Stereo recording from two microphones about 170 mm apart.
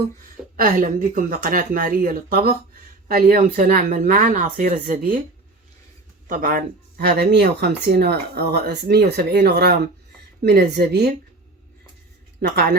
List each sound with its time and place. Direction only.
0.5 s speech: 55° right (ahead or behind)
6.2 s speech: 50° right (ahead or behind)
7.0 s speech: 80° right
12.4 s speech: 70° right (ahead or behind)